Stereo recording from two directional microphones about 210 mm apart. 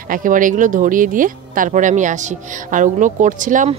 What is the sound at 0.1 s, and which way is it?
Speech, 40° right (ahead or behind).